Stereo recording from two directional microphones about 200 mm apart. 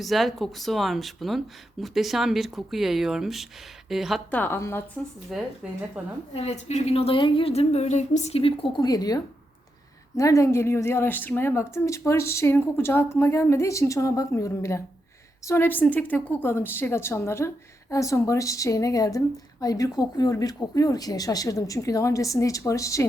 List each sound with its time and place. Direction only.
0.0 s a woman's voice: centre (ahead or behind)
5.3 s a woman's voice: centre (ahead or behind)
6.3 s a woman's voice: 30° left (ahead or behind); by 23.0 s 15° left (ahead or behind)